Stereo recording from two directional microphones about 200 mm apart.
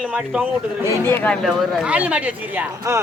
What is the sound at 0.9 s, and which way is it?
Speech, 10° left (ahead or behind).